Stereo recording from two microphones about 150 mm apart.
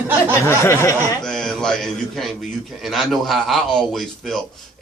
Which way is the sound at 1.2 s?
5° left (ahead or behind).